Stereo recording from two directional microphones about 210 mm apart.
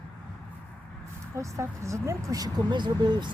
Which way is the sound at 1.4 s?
15° right (ahead or behind).